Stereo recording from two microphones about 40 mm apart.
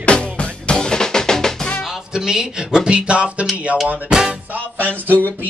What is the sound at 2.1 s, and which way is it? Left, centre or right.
Speech, centre.